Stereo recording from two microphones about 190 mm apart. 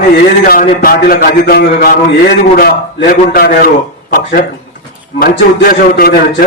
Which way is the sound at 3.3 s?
55° left (ahead or behind).